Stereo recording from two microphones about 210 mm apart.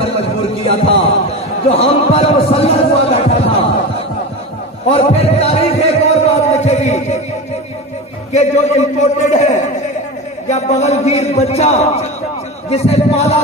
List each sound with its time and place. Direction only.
0.7 s music: 30° left (ahead or behind)
1.6 s speech: 30° left (ahead or behind)
4.9 s music: 30° left (ahead or behind)
8.3 s a man's voice: 30° left (ahead or behind)
12.6 s music: 30° left (ahead or behind)